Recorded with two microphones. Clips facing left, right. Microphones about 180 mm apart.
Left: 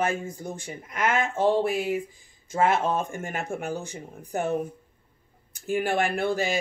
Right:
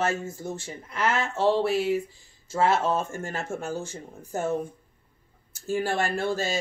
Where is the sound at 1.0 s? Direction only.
50° left (ahead or behind).